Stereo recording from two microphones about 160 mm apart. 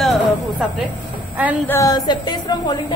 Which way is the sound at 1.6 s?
20° left (ahead or behind).